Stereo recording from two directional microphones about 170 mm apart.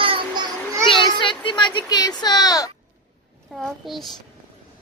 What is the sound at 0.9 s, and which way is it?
Speech, 30° left (ahead or behind).